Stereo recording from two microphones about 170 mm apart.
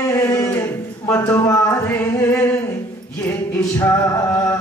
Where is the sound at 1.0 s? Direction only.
15° left (ahead or behind).